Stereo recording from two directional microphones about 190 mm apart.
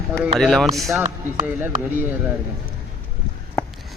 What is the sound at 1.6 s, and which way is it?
Speech, 10° right (ahead or behind).